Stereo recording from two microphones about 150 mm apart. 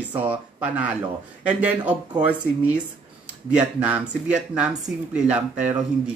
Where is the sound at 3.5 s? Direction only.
10° right (ahead or behind).